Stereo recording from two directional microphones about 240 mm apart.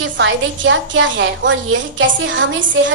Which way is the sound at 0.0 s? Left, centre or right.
Right.